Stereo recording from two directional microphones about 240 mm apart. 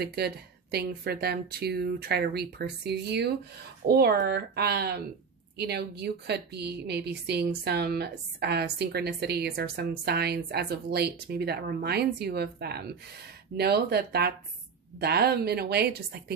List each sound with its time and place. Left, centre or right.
0.1 s a woman's voice: right